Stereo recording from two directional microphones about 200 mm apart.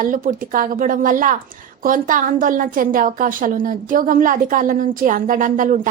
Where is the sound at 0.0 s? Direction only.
40° right (ahead or behind).